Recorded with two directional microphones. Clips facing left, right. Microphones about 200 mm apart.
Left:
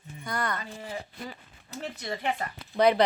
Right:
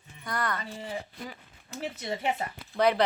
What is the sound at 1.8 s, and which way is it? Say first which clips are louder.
Speech: right 1 dB; 15° right (ahead or behind).